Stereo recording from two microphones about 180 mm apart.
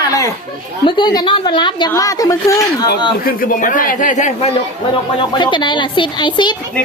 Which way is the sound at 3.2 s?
50° left (ahead or behind).